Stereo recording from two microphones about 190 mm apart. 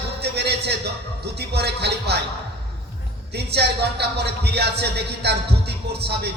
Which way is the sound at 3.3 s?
60° right (ahead or behind).